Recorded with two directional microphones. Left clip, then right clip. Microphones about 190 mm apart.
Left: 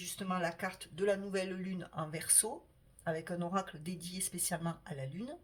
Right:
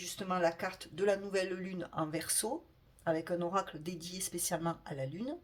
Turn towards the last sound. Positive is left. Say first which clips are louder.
# right 5 dB
turn(degrees=-20)  # may be behind; listen again after turning